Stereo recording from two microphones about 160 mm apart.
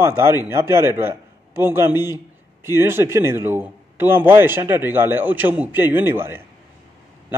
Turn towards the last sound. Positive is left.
turn(degrees=-15)  # may be behind; listen again after turning